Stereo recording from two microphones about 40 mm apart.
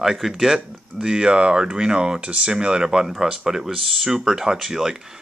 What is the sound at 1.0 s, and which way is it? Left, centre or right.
Speech, right.